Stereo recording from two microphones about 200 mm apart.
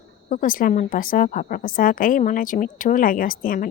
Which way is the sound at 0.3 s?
45° left (ahead or behind).